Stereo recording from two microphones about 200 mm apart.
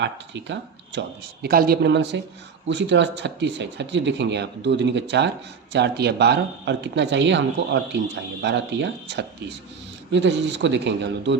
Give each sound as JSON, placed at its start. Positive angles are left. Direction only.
{"t": 0.0, "sound": "speech", "side_deg": -60}